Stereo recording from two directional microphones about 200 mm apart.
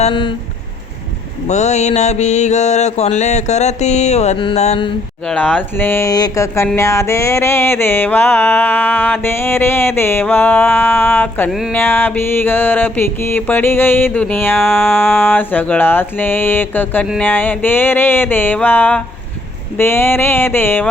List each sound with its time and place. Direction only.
0.0 s a sound: 25° left (ahead or behind)
1.5 s mantra: 35° left (ahead or behind)
5.2 s music: 5° left (ahead or behind)